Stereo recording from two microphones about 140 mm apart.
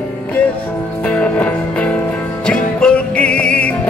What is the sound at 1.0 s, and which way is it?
Music, 10° left (ahead or behind).